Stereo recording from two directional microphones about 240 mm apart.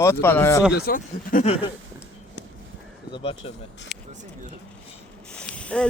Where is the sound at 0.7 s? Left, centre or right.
Left.